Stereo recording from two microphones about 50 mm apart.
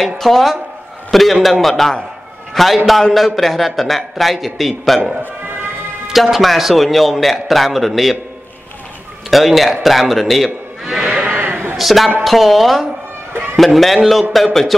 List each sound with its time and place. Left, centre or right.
0.2 s a man's voice: centre
9.3 s a man's voice: centre
11.0 s bleat: centre
11.2 s a sound: right
11.7 s a man's voice: centre